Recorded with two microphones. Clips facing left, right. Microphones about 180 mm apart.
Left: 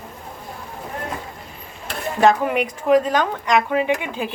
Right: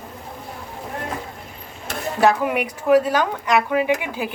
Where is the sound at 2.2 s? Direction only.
10° right (ahead or behind).